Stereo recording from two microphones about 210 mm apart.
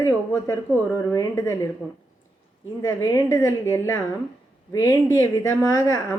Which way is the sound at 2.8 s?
15° left (ahead or behind).